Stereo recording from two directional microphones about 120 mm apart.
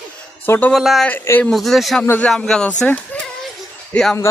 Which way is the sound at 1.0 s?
15° left (ahead or behind).